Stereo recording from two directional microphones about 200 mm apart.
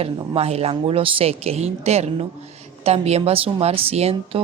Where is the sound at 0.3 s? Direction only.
30° right (ahead or behind).